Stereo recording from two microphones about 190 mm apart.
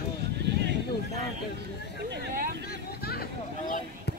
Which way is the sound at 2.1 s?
55° right (ahead or behind).